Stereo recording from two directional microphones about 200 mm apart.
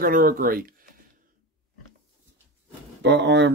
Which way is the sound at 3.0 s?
60° right (ahead or behind).